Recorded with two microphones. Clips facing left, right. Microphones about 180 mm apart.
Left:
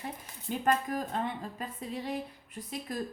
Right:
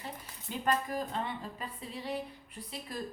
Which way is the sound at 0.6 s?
45° left (ahead or behind).